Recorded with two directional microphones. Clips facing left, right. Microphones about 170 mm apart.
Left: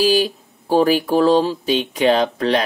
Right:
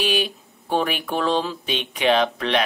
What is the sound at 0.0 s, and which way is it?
Speech, 35° left (ahead or behind).